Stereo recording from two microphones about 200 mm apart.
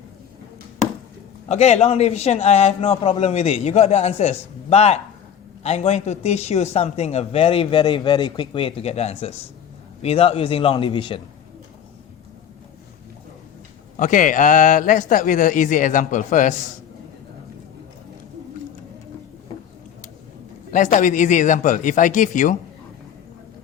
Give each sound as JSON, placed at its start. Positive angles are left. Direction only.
{"t": 1.5, "sound": "a man's voice", "side_deg": 35}
{"t": 13.9, "sound": "speech", "side_deg": 40}
{"t": 20.7, "sound": "speech", "side_deg": 40}